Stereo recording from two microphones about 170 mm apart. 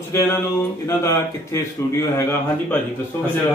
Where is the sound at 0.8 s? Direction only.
15° left (ahead or behind).